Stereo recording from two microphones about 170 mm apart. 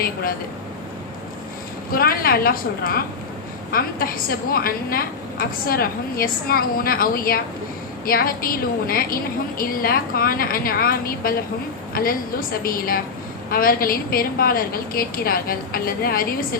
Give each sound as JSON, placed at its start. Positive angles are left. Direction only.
{"t": 1.9, "sound": "a woman's voice", "side_deg": 60}